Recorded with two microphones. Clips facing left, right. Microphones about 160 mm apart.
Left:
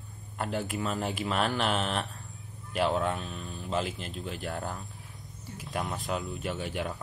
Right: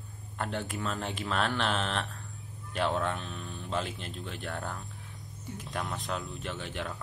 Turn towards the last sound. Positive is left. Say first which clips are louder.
# left 4 dB
turn(degrees=10)  # may be behind; listen again after turning